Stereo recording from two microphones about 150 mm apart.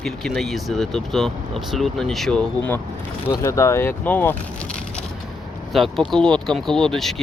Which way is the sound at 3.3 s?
20° left (ahead or behind).